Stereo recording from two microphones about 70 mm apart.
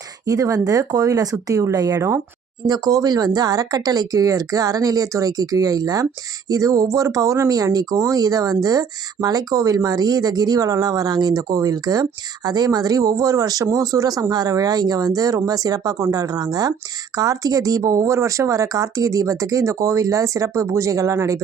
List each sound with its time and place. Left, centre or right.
0.3 s speech: right
2.0 s speech: right
2.6 s speech: right
17.2 s speech: right